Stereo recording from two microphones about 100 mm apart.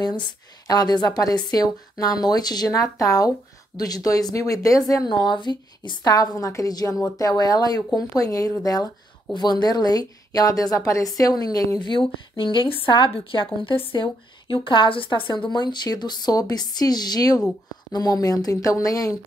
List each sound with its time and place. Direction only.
0.0 s a woman's voice: 45° left (ahead or behind)
5.1 s a woman's voice: 50° left (ahead or behind)